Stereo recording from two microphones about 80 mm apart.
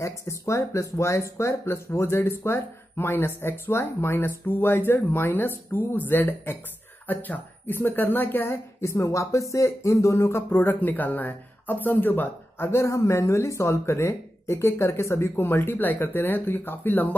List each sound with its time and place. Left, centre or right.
0.0 s speech: left